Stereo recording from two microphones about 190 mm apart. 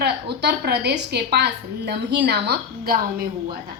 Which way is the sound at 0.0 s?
60° right (ahead or behind).